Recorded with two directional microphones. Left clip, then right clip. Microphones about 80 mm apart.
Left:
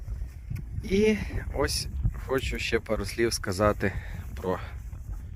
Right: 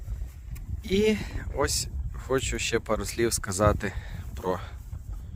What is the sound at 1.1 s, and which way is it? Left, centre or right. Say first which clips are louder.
Speech: even; right.